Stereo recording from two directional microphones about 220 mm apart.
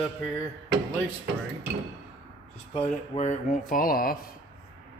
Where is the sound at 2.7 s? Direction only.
30° left (ahead or behind).